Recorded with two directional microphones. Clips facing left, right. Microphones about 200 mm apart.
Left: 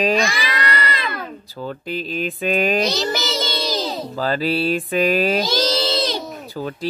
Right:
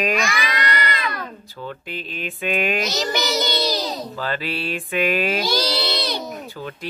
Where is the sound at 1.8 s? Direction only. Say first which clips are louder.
Left 6 dB; 40° left (ahead or behind).